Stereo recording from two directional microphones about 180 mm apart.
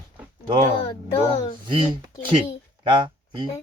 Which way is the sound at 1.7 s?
25° right (ahead or behind).